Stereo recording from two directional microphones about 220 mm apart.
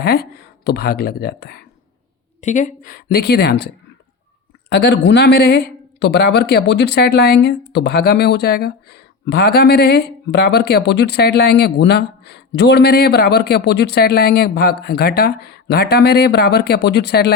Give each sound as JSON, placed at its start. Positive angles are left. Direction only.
{"t": 0.0, "sound": "speech", "side_deg": 45}
{"t": 2.4, "sound": "speech", "side_deg": 35}
{"t": 4.7, "sound": "speech", "side_deg": 50}